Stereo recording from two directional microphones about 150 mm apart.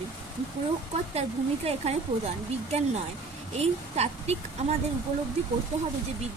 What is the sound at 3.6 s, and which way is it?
Speech, 45° right (ahead or behind).